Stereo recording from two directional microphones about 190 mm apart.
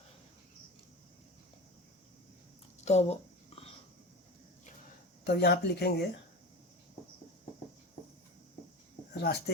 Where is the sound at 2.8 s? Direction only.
35° left (ahead or behind).